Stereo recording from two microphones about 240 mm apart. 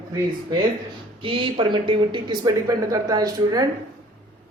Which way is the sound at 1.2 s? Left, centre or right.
Right.